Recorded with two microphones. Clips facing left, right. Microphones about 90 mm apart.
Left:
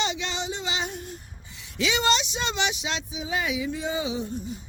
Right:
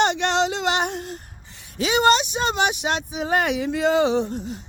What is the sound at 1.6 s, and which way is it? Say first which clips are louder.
Speech: right 6 dB; 40° right (ahead or behind).